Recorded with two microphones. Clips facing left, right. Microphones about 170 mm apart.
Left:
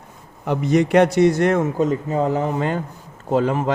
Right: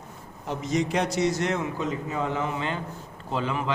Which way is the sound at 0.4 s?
65° left (ahead or behind).